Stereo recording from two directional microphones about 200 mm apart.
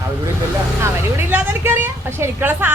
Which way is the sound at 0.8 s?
10° right (ahead or behind).